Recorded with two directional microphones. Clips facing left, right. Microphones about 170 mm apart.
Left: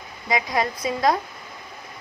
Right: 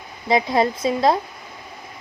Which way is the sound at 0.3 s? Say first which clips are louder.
Right 5 dB; 25° right (ahead or behind).